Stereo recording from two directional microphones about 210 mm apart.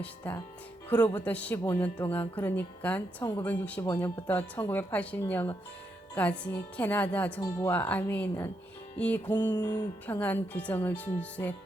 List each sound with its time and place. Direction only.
0.0 s speech: 10° left (ahead or behind)